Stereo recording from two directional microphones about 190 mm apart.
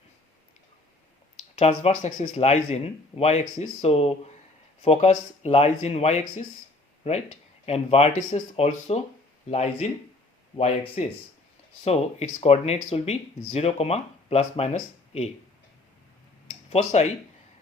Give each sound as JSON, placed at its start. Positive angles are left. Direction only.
{"t": 1.5, "sound": "speech", "side_deg": 35}
{"t": 11.0, "sound": "speech", "side_deg": 40}
{"t": 16.6, "sound": "speech", "side_deg": 35}